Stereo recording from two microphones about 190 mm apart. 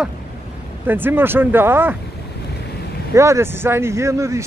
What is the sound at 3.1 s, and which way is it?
Speech, 15° right (ahead or behind).